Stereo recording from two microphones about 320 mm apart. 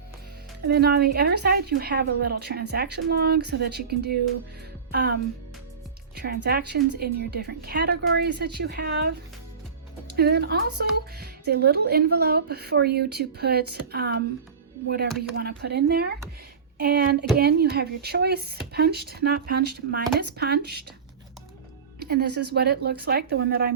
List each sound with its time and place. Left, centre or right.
0.7 s a woman's voice: right
6.1 s a woman's voice: right
15.4 s speech: right
22.0 s speech: right